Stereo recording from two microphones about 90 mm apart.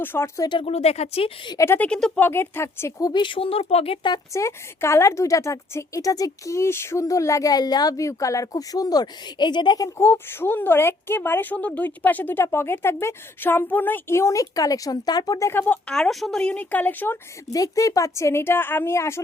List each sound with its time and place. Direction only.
0.0 s a woman's voice: 25° left (ahead or behind)
1.0 s a woman's voice: 90° left
1.5 s a woman's voice: 30° left (ahead or behind)
1.8 s a woman's voice: 10° left (ahead or behind)
2.1 s a woman's voice: 25° left (ahead or behind)
3.0 s speech: 55° left (ahead or behind); by 4.1 s 90° left
4.3 s a woman's voice: 30° left (ahead or behind); by 9.9 s 50° left (ahead or behind)
10.0 s a woman's voice: 25° left (ahead or behind); by 15.4 s 45° left (ahead or behind)
15.4 s a woman's voice: 20° left (ahead or behind)
16.0 s a woman's voice: 5° left (ahead or behind); by 17.2 s 20° left (ahead or behind)
17.5 s a woman's voice: 40° left (ahead or behind)